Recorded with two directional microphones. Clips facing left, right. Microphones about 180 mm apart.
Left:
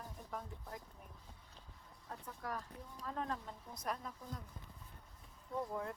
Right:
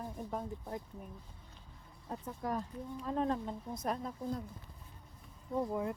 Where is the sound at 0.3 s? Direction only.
30° right (ahead or behind).